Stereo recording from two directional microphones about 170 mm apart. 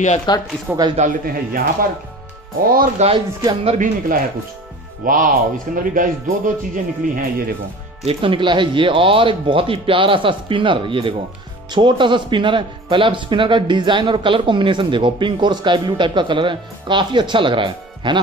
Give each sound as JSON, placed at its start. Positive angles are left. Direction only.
{"t": 0.3, "sound": "speech", "side_deg": 25}
{"t": 0.7, "sound": "speech", "side_deg": -25}
{"t": 0.9, "sound": "speech", "side_deg": -55}
{"t": 3.0, "sound": "speech", "side_deg": -35}
{"t": 5.0, "sound": "speech", "side_deg": -50}
{"t": 8.0, "sound": "speech", "side_deg": -35}